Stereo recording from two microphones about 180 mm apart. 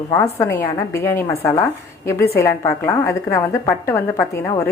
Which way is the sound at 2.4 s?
15° left (ahead or behind).